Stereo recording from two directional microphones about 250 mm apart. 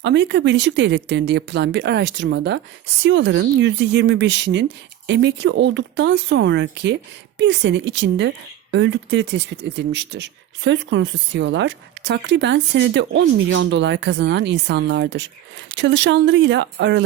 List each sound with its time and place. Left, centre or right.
0.0 s speech: right